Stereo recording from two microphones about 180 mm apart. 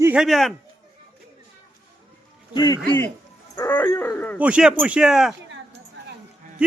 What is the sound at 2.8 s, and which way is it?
Speech, 10° left (ahead or behind).